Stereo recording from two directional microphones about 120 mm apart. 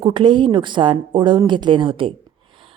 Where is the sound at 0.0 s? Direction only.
45° right (ahead or behind).